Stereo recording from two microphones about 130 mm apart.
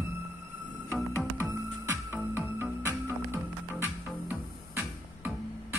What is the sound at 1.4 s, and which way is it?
Music, 20° right (ahead or behind).